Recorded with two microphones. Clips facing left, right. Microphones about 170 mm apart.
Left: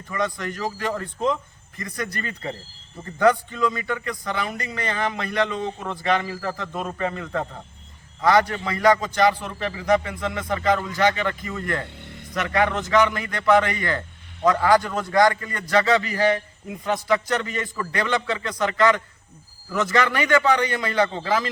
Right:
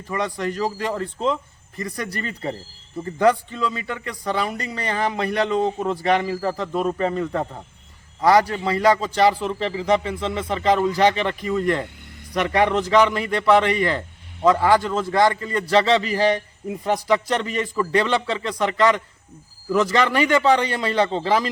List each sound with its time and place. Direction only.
0.1 s a man's voice: 30° right (ahead or behind)